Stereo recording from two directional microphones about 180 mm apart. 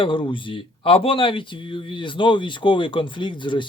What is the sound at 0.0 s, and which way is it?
Speech, 30° left (ahead or behind).